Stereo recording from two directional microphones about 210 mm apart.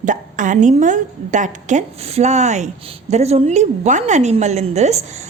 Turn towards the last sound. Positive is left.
turn(degrees=-30)  # may be behind; listen again after turning